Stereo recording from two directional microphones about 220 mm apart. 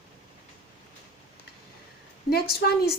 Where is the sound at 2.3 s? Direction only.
45° left (ahead or behind).